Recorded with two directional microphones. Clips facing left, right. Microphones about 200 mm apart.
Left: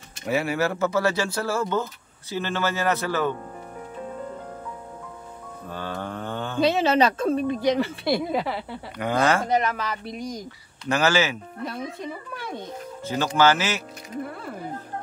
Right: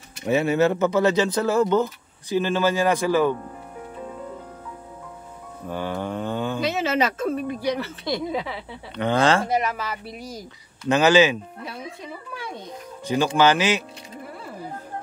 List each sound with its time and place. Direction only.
0.3 s speech: 20° right (ahead or behind)
5.7 s mantra: 15° right (ahead or behind)
6.6 s speech: 30° left (ahead or behind); by 8.7 s 5° left (ahead or behind)
8.9 s speech: 25° right (ahead or behind)
9.5 s speech: 10° right (ahead or behind)
10.9 s speech: 15° right (ahead or behind)
13.0 s speech: 15° right (ahead or behind)